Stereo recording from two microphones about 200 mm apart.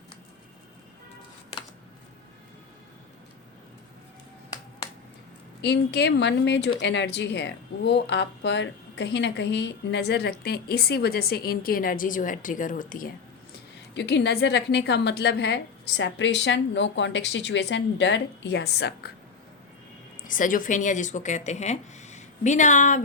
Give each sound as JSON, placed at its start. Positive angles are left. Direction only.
{"t": 5.6, "sound": "speech", "side_deg": 55}
{"t": 13.9, "sound": "speech", "side_deg": 60}
{"t": 20.2, "sound": "speech", "side_deg": 40}